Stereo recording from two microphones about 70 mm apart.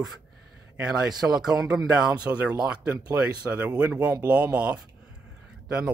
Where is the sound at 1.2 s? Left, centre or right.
Right.